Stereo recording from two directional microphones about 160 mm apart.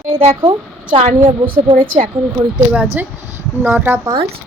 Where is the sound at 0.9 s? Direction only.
50° right (ahead or behind).